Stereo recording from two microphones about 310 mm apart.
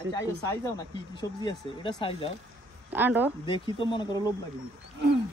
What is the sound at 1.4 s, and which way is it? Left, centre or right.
Speech, centre.